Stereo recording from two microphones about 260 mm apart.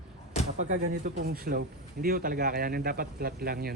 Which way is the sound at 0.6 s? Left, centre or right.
Right.